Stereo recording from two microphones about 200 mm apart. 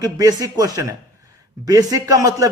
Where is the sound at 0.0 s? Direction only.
20° right (ahead or behind).